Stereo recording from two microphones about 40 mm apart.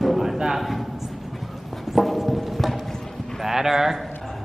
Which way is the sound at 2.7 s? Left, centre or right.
Centre.